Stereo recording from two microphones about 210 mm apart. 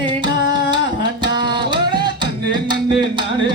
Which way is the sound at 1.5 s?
20° right (ahead or behind).